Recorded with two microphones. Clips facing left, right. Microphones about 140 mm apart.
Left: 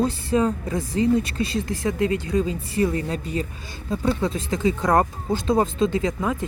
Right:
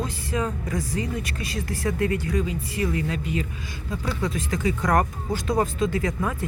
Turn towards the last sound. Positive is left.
turn(degrees=20)  # may be behind; listen again after turning